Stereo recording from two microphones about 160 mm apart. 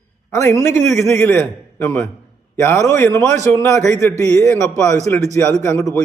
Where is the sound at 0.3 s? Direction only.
20° left (ahead or behind).